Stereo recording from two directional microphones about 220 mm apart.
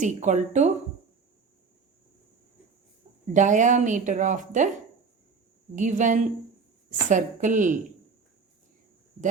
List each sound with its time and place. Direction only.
0.0 s speech: 35° right (ahead or behind)
3.3 s speech: 35° right (ahead or behind)
5.7 s speech: 35° right (ahead or behind)